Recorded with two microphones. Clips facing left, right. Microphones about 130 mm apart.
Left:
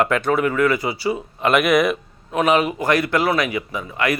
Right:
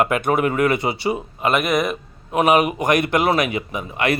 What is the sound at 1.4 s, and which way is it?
Speech, centre (ahead or behind).